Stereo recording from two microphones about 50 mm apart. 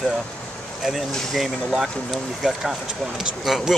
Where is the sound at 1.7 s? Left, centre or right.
Centre.